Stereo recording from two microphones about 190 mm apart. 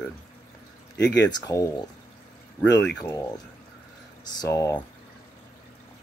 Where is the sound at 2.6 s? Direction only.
5° left (ahead or behind).